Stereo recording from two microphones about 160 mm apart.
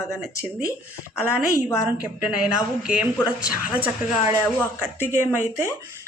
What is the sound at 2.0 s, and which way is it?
A man's voice, 5° right (ahead or behind).